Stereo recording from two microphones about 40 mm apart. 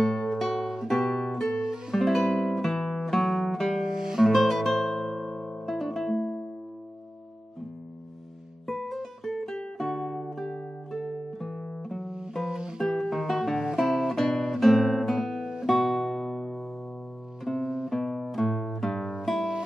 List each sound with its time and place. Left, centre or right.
0.3 s music: centre
0.8 s guitar: centre
1.6 s music: centre
2.0 s guitar: centre
2.5 s music: centre
3.9 s music: centre
4.3 s music: centre
8.6 s music: centre
12.0 s music: centre
12.7 s music: centre
17.5 s guitar: centre
17.8 s music: centre